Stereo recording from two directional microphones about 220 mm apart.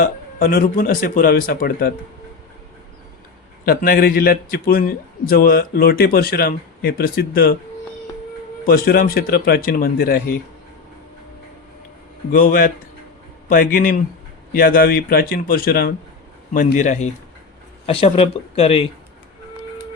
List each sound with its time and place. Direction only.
0.0 s speech: 40° left (ahead or behind)
3.7 s a man's voice: 45° left (ahead or behind)
8.6 s a man's voice: 45° left (ahead or behind)
12.3 s a man's voice: 40° left (ahead or behind)